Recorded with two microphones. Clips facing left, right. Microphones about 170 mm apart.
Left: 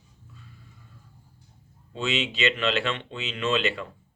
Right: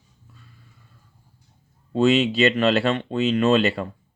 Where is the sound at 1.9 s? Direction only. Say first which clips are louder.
Right 11 dB; 40° right (ahead or behind).